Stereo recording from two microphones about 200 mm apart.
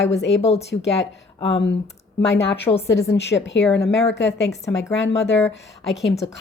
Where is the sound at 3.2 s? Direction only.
60° left (ahead or behind).